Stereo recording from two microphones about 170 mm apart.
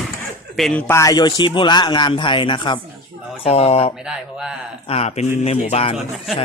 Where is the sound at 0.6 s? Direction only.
5° left (ahead or behind); by 3.9 s 35° left (ahead or behind).